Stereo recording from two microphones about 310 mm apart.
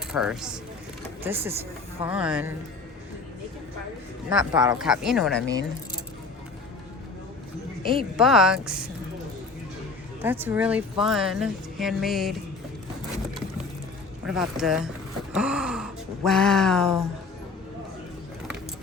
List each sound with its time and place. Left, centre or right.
0.1 s speech: centre
4.3 s speech: centre
7.9 s speech: centre
10.2 s speech: centre
14.3 s speech: centre